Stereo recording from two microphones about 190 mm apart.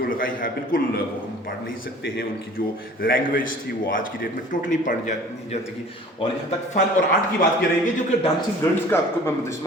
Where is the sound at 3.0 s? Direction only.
50° left (ahead or behind).